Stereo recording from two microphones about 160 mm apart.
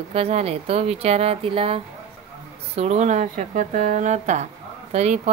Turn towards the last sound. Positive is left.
turn(degrees=-45)  # may be behind; listen again after turning